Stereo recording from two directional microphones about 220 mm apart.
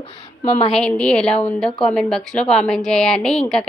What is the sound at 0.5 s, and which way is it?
Speech, 25° left (ahead or behind).